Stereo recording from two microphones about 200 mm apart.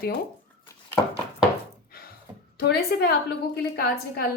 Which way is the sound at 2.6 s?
55° left (ahead or behind).